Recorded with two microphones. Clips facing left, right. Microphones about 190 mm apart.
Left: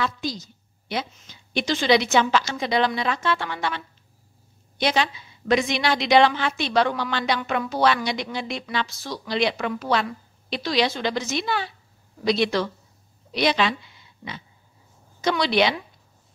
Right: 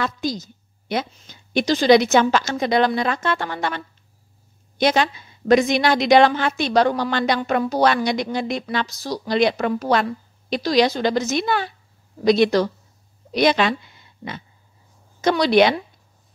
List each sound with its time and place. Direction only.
0.0 s a woman's voice: 45° right (ahead or behind)